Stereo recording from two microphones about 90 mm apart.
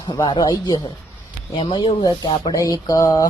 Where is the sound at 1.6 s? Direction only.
75° left (ahead or behind); by 2.1 s 60° left (ahead or behind).